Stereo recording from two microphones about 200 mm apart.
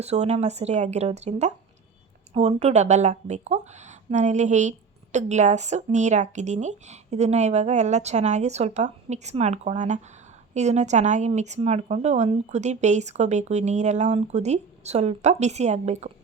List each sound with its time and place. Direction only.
0.0 s a woman's voice: 35° right (ahead or behind)